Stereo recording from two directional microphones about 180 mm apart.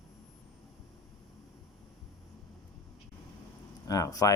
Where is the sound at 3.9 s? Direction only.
20° left (ahead or behind).